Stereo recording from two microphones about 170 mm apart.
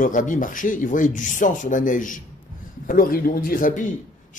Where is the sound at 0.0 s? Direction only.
50° left (ahead or behind).